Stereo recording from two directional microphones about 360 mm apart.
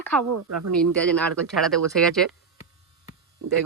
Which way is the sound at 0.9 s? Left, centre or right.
Centre.